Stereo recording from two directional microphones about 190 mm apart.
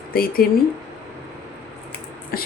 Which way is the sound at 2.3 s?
50° left (ahead or behind).